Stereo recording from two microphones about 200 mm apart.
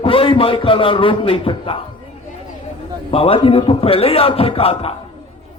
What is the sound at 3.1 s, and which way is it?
A man's voice, 25° left (ahead or behind).